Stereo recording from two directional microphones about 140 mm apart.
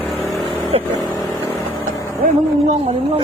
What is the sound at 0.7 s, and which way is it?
Vehicle, 45° right (ahead or behind).